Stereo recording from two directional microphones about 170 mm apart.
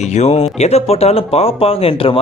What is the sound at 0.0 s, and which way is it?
A man's voice, 40° left (ahead or behind).